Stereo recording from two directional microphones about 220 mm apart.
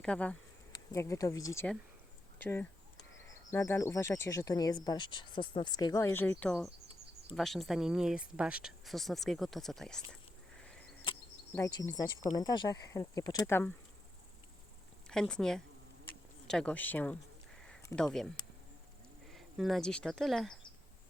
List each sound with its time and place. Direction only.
0.0 s speech: 5° left (ahead or behind)
10.6 s a sound: 5° left (ahead or behind)
11.5 s speech: 15° left (ahead or behind)
15.0 s speech: 5° left (ahead or behind)